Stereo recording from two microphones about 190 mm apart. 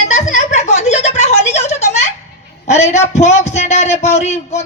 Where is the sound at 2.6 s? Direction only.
35° left (ahead or behind).